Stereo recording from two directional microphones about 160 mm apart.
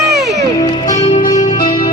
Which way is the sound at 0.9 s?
45° left (ahead or behind).